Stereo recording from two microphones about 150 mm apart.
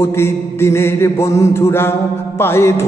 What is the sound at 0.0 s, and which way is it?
A man's voice, 15° left (ahead or behind).